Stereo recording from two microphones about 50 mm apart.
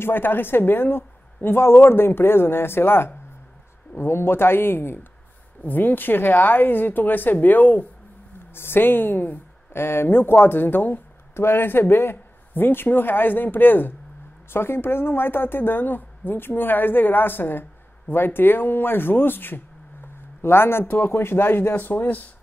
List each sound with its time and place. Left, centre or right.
0.0 s speech: left
5.6 s a woman's voice: left
14.5 s speech: left
20.8 s a woman's voice: left
21.1 s speech: left